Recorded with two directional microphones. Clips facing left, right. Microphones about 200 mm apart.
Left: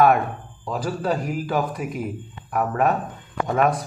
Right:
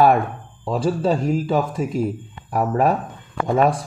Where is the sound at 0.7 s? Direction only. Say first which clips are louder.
Right 5 dB; 30° right (ahead or behind).